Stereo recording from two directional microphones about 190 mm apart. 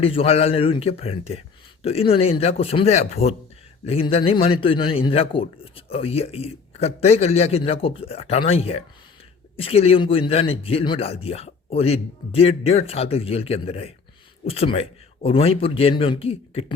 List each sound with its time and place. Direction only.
0.0 s a man's voice: 30° left (ahead or behind)